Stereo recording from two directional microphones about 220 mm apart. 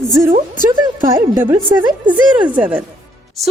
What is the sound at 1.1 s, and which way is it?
A woman's voice, 15° right (ahead or behind).